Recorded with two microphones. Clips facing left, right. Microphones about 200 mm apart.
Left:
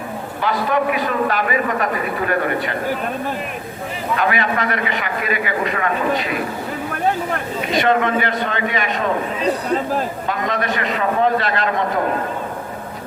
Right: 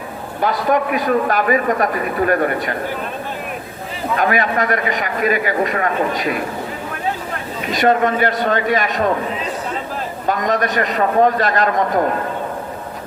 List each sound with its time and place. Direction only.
0.4 s a man's voice: 45° right (ahead or behind)
4.2 s a man's voice: 45° right (ahead or behind)
7.7 s a man's voice: 45° right (ahead or behind)
10.2 s a man's voice: 45° right (ahead or behind)